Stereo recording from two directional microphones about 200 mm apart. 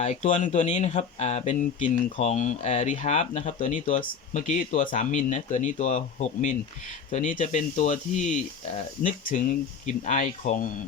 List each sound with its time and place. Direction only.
0.0 s speech: 35° left (ahead or behind)